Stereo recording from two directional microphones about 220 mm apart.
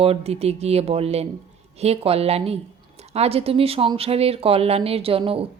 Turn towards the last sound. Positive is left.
turn(degrees=-25)  # may be behind; listen again after turning